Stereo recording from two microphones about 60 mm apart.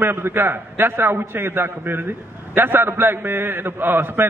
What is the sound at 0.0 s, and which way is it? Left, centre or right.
A man's voice, right.